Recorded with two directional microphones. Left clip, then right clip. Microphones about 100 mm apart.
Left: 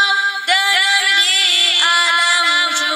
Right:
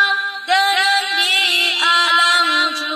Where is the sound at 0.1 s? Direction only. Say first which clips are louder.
Left 2 dB; 65° left (ahead or behind).